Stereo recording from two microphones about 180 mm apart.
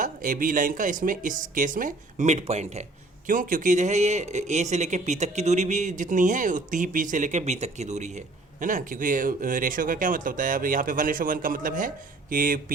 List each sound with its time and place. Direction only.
0.0 s speech: 50° right (ahead or behind)